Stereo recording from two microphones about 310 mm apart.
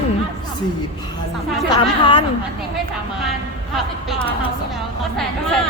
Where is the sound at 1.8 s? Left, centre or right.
Centre.